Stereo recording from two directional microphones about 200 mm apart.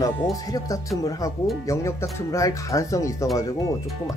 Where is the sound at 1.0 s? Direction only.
15° left (ahead or behind).